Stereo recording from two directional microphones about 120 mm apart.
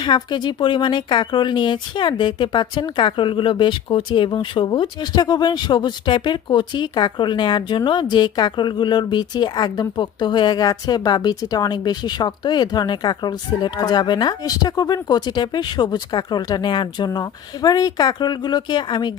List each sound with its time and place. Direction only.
0.0 s speech: 40° left (ahead or behind)